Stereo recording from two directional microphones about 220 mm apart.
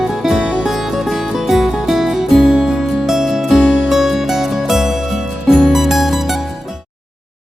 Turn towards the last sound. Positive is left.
turn(degrees=0)  # may be behind; listen again after turning